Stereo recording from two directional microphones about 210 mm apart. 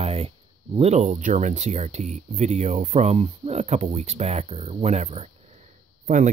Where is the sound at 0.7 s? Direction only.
30° right (ahead or behind).